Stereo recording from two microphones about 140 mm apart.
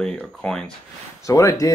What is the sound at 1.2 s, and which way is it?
Speech, 25° left (ahead or behind).